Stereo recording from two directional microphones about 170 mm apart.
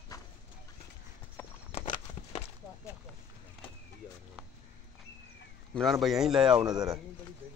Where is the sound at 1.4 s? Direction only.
15° left (ahead or behind).